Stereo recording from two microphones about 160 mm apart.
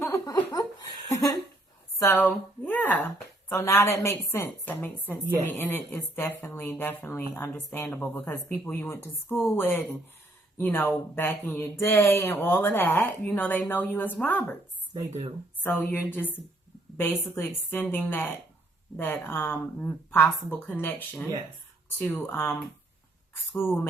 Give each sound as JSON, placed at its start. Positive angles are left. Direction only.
{"t": 0.0, "sound": "laughter", "side_deg": 15}
{"t": 1.1, "sound": "a woman's voice", "side_deg": 20}
{"t": 2.6, "sound": "a sound", "side_deg": 10}
{"t": 3.5, "sound": "speech", "side_deg": 15}
{"t": 15.6, "sound": "speech", "side_deg": 10}
{"t": 17.3, "sound": "speech", "side_deg": 15}